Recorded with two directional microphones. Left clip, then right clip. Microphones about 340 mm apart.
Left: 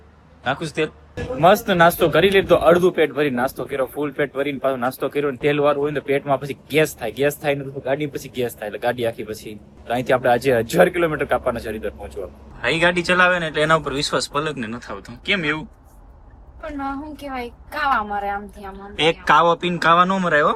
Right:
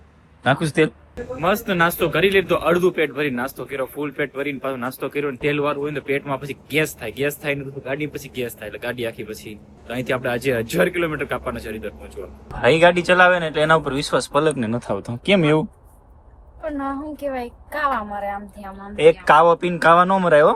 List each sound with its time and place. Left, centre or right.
0.4 s a man's voice: right
1.1 s speech: centre
18.9 s speech: centre